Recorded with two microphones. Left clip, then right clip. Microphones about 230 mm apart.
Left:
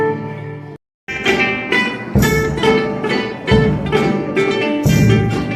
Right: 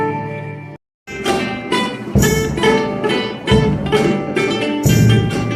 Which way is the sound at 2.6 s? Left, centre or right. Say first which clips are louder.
Right 2 dB; right.